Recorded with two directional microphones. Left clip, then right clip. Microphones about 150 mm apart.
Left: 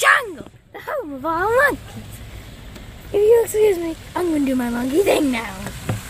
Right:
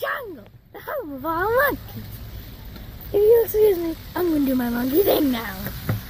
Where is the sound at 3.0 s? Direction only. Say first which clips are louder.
Left 2 dB; centre (ahead or behind).